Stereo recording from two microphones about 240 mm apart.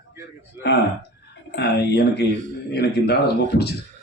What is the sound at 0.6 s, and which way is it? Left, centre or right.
Speech, left.